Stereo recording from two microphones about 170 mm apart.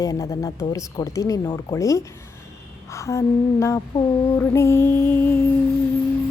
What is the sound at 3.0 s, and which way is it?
Music, 15° left (ahead or behind).